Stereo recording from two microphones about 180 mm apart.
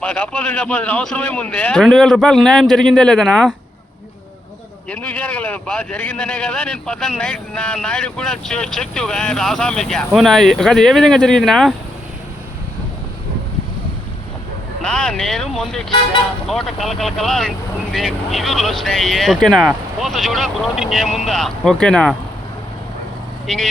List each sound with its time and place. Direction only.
0.0 s speech: 5° left (ahead or behind)
4.9 s speech: 10° left (ahead or behind)
14.8 s speech: 5° left (ahead or behind)